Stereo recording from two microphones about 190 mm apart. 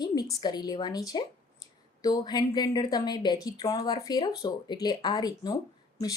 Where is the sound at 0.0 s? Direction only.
20° left (ahead or behind).